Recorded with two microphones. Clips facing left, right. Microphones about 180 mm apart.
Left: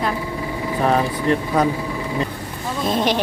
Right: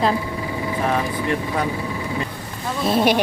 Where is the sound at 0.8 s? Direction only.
40° left (ahead or behind).